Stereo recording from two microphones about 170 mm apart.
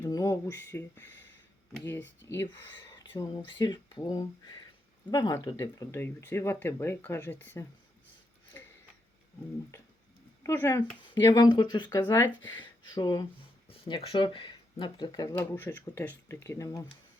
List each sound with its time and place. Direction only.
0.0 s speech: 20° left (ahead or behind)
2.3 s speech: 15° left (ahead or behind)
10.4 s speech: 15° left (ahead or behind)
11.0 s speech: 25° left (ahead or behind)
15.4 s speech: 10° left (ahead or behind)